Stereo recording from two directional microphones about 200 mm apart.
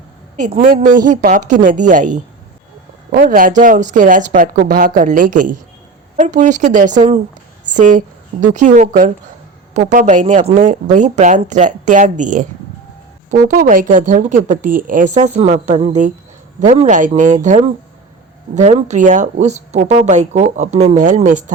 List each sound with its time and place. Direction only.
0.3 s a woman's voice: 40° right (ahead or behind)